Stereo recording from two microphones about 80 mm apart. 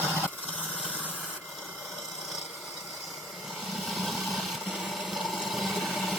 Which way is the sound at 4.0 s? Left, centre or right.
Centre.